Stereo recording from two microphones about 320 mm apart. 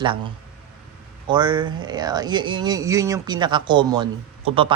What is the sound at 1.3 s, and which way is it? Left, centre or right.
Speech, centre.